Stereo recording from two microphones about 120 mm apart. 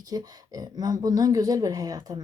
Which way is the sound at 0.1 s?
30° right (ahead or behind).